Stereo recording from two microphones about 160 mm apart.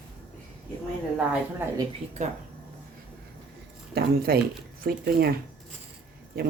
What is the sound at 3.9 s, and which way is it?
Speech, 75° right (ahead or behind).